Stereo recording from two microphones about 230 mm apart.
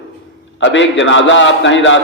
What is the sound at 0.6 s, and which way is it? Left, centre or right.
A man's voice, left.